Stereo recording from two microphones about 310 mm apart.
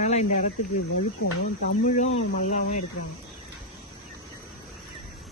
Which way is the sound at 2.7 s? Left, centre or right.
Left.